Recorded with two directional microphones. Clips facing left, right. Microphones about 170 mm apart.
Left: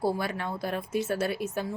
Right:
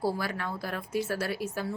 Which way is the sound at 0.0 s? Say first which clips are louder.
Left 2 dB; 20° left (ahead or behind).